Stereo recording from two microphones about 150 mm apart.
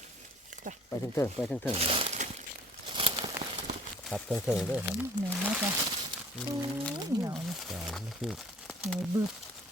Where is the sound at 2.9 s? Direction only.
35° right (ahead or behind).